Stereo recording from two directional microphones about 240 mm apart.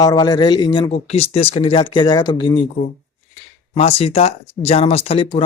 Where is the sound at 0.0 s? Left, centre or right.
Centre.